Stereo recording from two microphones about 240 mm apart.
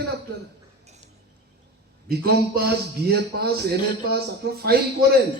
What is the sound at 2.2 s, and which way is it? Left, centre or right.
A man's voice, right.